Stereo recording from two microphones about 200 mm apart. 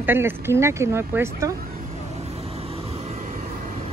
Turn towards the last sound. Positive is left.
turn(degrees=-35)  # may be behind; listen again after turning